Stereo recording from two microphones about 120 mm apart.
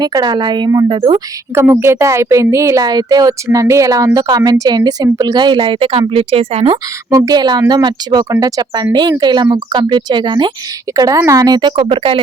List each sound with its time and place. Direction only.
0.0 s speech: 35° right (ahead or behind)
0.9 s speech: 45° right (ahead or behind)
1.5 s speech: 20° right (ahead or behind); by 6.7 s 55° right (ahead or behind)
7.3 s speech: 35° right (ahead or behind)
10.9 s speech: 25° right (ahead or behind); by 12.2 s 50° right (ahead or behind)